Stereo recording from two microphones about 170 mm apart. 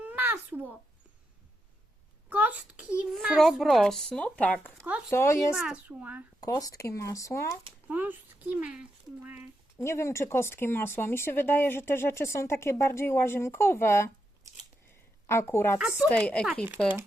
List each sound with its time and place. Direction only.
0.0 s a sound: 10° right (ahead or behind)
2.3 s a child's voice: 10° right (ahead or behind); by 4.9 s 10° left (ahead or behind)
4.9 s a child's voice: 5° right (ahead or behind)
5.1 s speech: 15° left (ahead or behind)
5.5 s a woman's voice: 5° right (ahead or behind)
6.4 s speech: 20° left (ahead or behind)
7.9 s speech: 10° right (ahead or behind)
9.7 s speech: 15° left (ahead or behind)
15.3 s speech: 15° left (ahead or behind)